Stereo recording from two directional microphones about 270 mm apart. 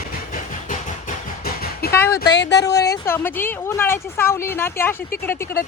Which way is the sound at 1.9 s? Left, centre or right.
Centre.